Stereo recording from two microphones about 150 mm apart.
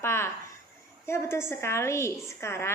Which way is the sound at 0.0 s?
15° left (ahead or behind).